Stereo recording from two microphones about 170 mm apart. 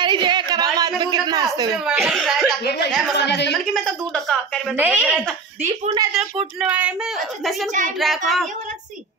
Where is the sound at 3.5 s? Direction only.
5° left (ahead or behind).